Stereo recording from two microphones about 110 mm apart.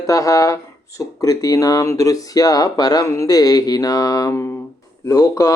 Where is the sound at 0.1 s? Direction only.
30° left (ahead or behind).